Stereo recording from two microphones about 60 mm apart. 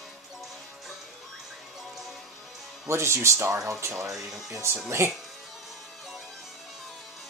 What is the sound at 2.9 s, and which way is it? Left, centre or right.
Speech, right.